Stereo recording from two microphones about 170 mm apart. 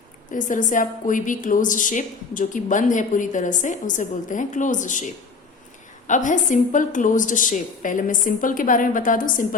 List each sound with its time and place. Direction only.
0.3 s a woman's voice: 50° left (ahead or behind)